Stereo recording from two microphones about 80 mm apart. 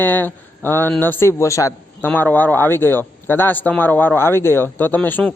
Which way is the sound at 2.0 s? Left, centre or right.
Left.